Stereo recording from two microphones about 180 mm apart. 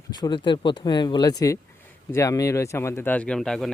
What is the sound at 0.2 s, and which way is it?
Speech, 25° left (ahead or behind).